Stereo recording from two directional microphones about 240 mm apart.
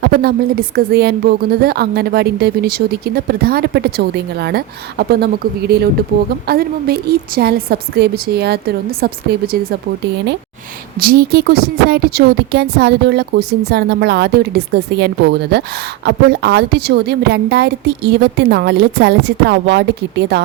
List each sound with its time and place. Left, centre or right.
0.0 s speech: right
11.0 s speech: right